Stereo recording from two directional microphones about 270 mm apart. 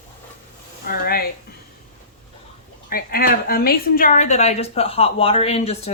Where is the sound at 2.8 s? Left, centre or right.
Left.